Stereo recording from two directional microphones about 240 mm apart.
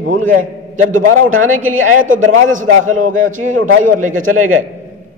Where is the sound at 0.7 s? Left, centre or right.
Right.